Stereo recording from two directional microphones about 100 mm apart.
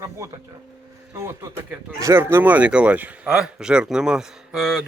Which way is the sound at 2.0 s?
30° right (ahead or behind).